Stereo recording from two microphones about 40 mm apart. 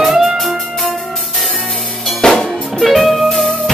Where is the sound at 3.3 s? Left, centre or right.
Centre.